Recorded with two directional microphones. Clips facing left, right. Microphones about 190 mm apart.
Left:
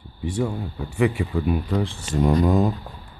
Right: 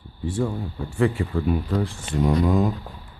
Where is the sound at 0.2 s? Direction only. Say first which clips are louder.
Even; 10° left (ahead or behind).